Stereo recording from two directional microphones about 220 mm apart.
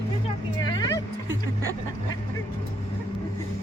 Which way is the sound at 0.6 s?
20° left (ahead or behind).